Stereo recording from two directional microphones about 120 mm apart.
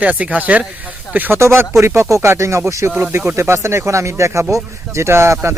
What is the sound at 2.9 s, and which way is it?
Speech, 15° right (ahead or behind).